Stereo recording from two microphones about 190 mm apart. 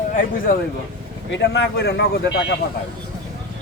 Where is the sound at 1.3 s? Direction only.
65° left (ahead or behind).